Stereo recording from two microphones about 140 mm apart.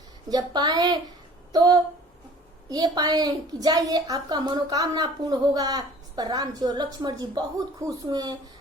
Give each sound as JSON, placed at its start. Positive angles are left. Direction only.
{"t": 0.3, "sound": "a woman's voice", "side_deg": -30}